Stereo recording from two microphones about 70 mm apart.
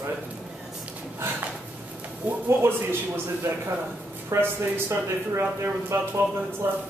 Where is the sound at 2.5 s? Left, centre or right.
Right.